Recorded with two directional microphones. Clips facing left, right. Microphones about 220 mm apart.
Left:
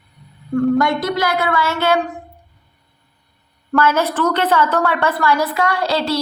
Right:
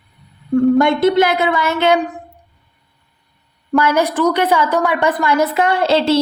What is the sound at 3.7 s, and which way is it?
A woman's voice, 15° right (ahead or behind).